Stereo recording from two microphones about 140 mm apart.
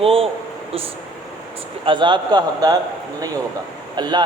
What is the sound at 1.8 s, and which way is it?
Speech, 35° right (ahead or behind).